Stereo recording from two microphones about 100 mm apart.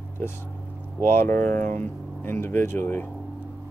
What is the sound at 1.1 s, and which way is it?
Speech, 20° left (ahead or behind).